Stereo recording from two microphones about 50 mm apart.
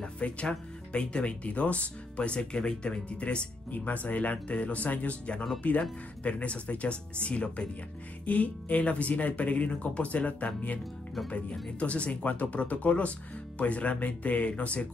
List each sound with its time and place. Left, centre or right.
0.0 s speech: left